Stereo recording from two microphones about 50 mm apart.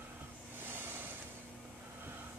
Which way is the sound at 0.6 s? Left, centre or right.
Right.